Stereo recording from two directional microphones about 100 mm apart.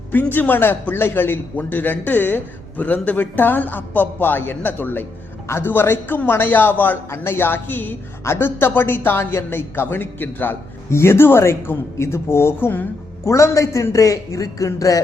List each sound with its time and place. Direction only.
0.1 s a man's voice: 20° left (ahead or behind); by 15.0 s 35° left (ahead or behind)